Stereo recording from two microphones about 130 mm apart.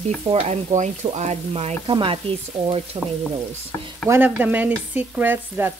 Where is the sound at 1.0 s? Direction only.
55° right (ahead or behind).